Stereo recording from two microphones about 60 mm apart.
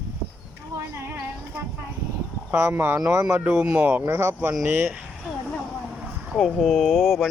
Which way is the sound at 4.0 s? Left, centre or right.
Right.